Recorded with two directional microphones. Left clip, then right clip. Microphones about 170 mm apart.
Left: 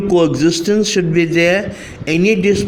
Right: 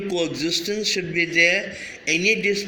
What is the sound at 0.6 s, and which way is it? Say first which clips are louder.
A man's voice: left 9 dB; 45° left (ahead or behind).